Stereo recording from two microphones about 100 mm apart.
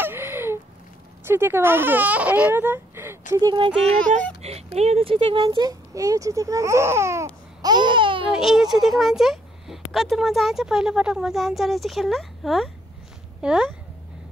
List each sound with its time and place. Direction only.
0.0 s a sound: 25° right (ahead or behind)
1.2 s speech: 25° right (ahead or behind)
3.4 s speech: 55° right (ahead or behind)
4.4 s speech: 90° right; by 5.4 s 65° right (ahead or behind)
5.5 s speech: 40° right (ahead or behind)
7.6 s babbling: 50° right (ahead or behind)
8.3 s speech: 5° right (ahead or behind)